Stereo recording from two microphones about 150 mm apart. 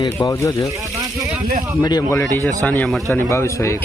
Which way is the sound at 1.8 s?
25° left (ahead or behind).